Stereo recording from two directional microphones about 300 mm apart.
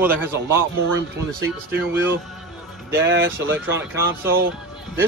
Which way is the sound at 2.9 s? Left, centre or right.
Right.